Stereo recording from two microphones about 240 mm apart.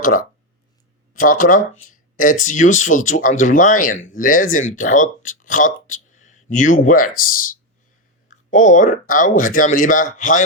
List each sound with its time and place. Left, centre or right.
0.0 s speech: left